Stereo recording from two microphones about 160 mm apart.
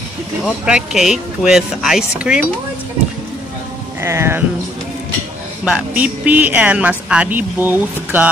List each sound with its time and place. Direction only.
0.5 s speech: 5° right (ahead or behind)
4.0 s speech: 15° right (ahead or behind)
5.7 s speech: 10° right (ahead or behind)